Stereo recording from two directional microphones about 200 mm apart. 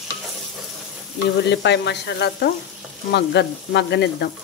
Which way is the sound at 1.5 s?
60° left (ahead or behind).